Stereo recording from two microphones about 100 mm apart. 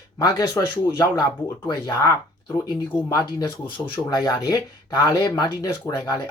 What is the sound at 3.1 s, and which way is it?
Speech, 35° left (ahead or behind).